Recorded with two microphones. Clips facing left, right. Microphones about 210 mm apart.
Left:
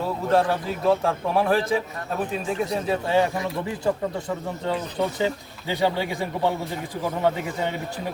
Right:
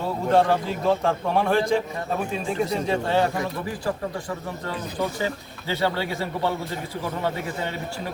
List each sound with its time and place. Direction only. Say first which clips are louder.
0.3 s a man's voice: right 2 dB; centre (ahead or behind)
4.6 s speech: left 3 dB; 20° left (ahead or behind)
7.6 s speech: left 2 dB; 15° left (ahead or behind)